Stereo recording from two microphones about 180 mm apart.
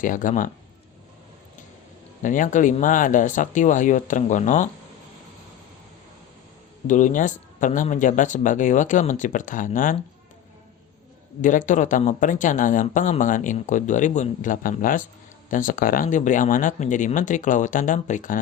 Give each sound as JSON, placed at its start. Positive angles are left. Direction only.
{"t": 0.0, "sound": "speech", "side_deg": 50}
{"t": 2.2, "sound": "speech", "side_deg": 45}
{"t": 6.8, "sound": "speech", "side_deg": 45}
{"t": 11.4, "sound": "speech", "side_deg": 45}